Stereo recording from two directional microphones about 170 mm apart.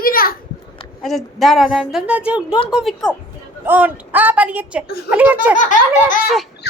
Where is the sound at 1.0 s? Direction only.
Centre (ahead or behind).